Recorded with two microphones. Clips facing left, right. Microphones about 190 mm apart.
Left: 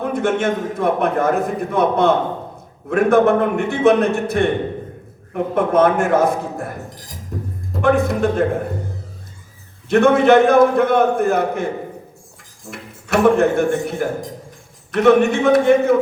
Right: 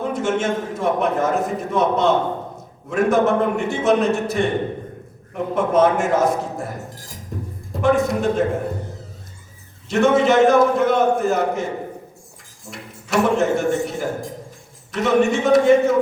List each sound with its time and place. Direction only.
0.0 s a man's voice: 55° left (ahead or behind)
7.8 s a man's voice: 55° left (ahead or behind)
9.9 s a man's voice: 55° left (ahead or behind)
13.1 s a man's voice: 60° left (ahead or behind)